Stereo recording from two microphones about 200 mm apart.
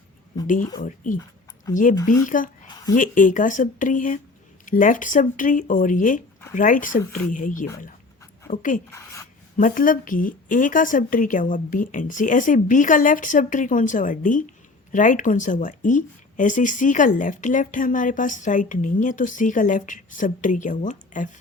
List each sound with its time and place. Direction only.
0.4 s speech: 40° left (ahead or behind)
2.6 s a sound: 20° left (ahead or behind)
2.9 s speech: 40° left (ahead or behind)
8.9 s speech: 15° left (ahead or behind)
9.6 s speech: 40° left (ahead or behind)